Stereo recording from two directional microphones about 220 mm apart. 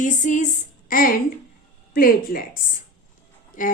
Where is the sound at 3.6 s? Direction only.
35° left (ahead or behind).